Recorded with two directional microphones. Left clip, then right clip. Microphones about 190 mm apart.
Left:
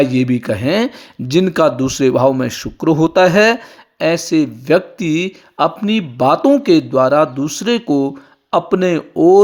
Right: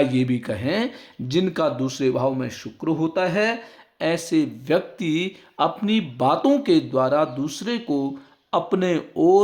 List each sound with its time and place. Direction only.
0.0 s speech: 30° left (ahead or behind); by 3.6 s 50° left (ahead or behind)
3.9 s speech: 30° left (ahead or behind)